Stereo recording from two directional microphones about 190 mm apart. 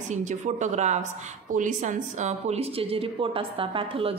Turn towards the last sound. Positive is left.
turn(degrees=-30)  # may be behind; listen again after turning